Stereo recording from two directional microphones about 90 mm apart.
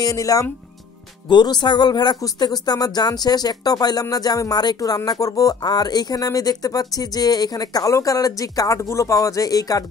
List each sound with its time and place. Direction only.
0.0 s speech: 40° left (ahead or behind)
1.3 s speech: 55° left (ahead or behind)